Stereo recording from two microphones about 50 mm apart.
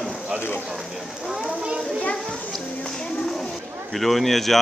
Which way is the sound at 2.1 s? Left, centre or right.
Centre.